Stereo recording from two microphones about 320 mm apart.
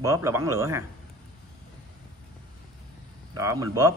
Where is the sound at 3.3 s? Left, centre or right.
Centre.